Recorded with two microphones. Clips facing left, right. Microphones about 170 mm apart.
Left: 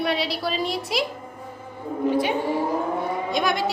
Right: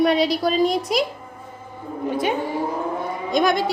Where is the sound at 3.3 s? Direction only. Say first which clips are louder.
Right 7 dB; 45° right (ahead or behind).